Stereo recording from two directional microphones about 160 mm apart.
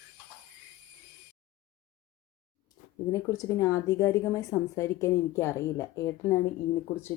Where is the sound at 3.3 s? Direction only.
20° left (ahead or behind).